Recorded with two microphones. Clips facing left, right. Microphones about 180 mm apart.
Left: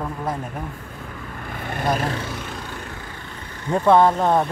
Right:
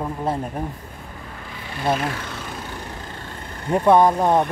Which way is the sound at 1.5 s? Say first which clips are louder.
Left 5 dB; 55° left (ahead or behind).